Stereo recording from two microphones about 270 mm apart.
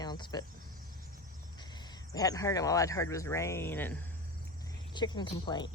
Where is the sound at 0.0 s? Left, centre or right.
Centre.